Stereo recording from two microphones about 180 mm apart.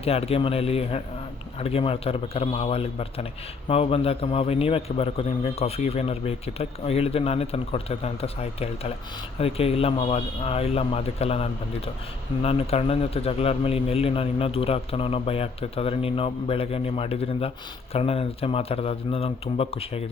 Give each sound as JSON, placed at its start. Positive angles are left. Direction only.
{"t": 0.0, "sound": "a man's voice", "side_deg": 35}